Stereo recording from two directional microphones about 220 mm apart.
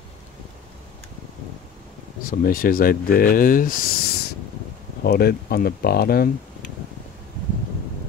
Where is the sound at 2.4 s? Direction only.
40° left (ahead or behind).